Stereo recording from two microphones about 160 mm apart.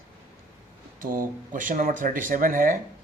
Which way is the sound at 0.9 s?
60° right (ahead or behind).